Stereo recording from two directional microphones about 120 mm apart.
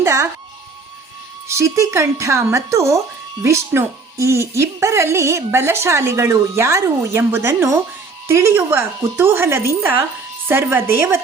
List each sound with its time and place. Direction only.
0.0 s music: 25° right (ahead or behind)
1.5 s a woman's voice: 25° right (ahead or behind)